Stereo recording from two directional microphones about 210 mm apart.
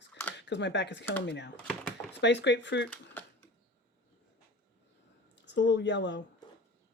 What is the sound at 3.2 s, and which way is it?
Typewriter, 10° left (ahead or behind).